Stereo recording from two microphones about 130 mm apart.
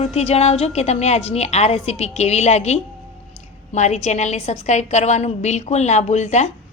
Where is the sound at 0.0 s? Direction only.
55° left (ahead or behind).